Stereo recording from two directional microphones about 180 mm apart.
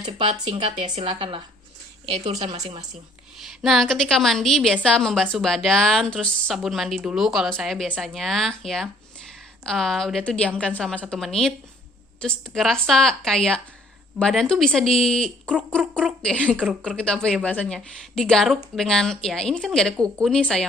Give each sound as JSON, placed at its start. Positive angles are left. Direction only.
{"t": 0.5, "sound": "a woman's voice", "side_deg": -30}
{"t": 2.4, "sound": "speech", "side_deg": -35}
{"t": 2.9, "sound": "a woman's voice", "side_deg": 0}